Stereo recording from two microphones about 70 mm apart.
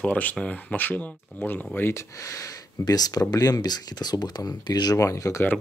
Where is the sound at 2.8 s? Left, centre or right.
Left.